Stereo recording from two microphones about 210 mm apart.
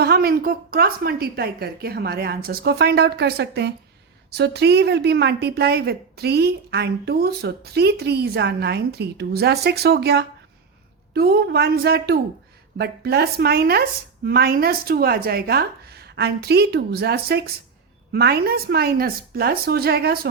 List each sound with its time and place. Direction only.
0.0 s a woman's voice: 50° right (ahead or behind)